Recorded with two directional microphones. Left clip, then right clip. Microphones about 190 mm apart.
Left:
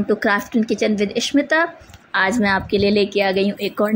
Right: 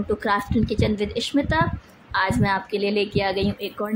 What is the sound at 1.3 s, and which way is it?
A woman's voice, 20° left (ahead or behind).